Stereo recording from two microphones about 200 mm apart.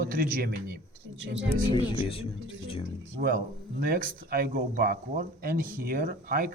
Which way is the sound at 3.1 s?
45° right (ahead or behind).